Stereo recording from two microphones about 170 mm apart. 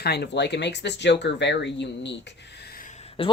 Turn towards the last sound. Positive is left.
turn(degrees=35)  # may be behind; listen again after turning